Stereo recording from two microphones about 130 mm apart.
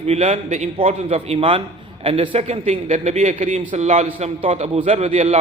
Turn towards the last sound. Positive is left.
turn(degrees=-50)  # may be behind; listen again after turning